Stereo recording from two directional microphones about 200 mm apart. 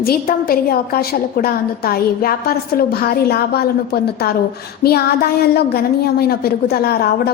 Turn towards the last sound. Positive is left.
turn(degrees=50)  # may be behind; listen again after turning